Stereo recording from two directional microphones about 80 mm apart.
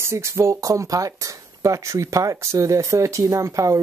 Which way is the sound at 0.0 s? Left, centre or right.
Right.